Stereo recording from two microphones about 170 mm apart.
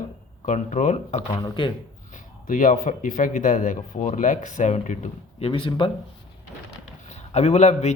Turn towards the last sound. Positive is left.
turn(degrees=40)  # may be behind; listen again after turning